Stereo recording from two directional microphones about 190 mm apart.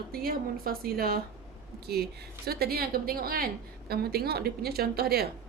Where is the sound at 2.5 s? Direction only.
55° right (ahead or behind).